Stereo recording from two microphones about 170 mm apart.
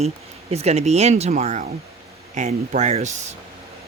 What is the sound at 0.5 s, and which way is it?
Speech, 40° right (ahead or behind).